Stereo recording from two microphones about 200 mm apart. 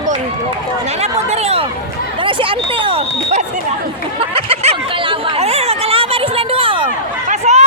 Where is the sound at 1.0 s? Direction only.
30° right (ahead or behind).